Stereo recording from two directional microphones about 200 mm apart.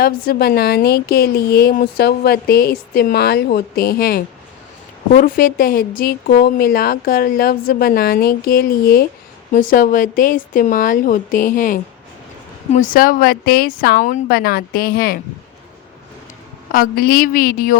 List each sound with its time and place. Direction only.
0.0 s a woman's voice: 50° left (ahead or behind)
16.7 s a woman's voice: 45° left (ahead or behind)